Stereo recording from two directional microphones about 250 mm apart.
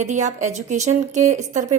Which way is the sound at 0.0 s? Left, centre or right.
Right.